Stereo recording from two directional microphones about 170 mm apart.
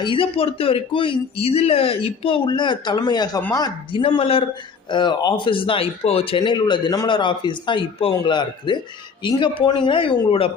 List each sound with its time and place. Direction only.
0.0 s speech: 30° left (ahead or behind)